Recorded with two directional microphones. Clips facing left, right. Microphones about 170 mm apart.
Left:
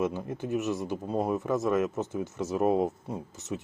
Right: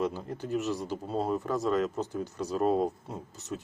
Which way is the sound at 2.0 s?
20° left (ahead or behind).